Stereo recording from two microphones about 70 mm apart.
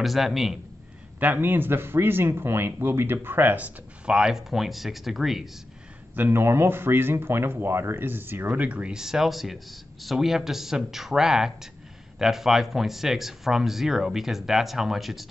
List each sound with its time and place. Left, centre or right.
0.0 s speech: centre
1.2 s speech: right; by 5.5 s centre
6.1 s speech: right
8.5 s speech: centre